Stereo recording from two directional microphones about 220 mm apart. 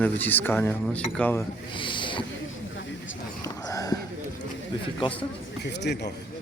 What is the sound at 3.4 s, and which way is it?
Whispering, 15° left (ahead or behind).